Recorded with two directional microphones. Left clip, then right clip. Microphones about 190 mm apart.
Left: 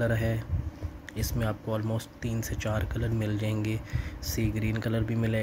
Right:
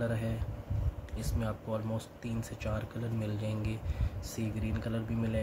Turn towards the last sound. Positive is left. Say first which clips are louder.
# left 6 dB
turn(degrees=35)  # may be behind; listen again after turning